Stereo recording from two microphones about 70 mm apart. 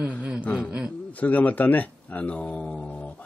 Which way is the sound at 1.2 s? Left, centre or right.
Left.